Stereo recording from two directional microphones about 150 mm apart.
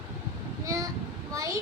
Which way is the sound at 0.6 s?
25° right (ahead or behind).